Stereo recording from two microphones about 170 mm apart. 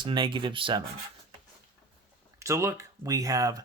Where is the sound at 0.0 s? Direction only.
30° right (ahead or behind).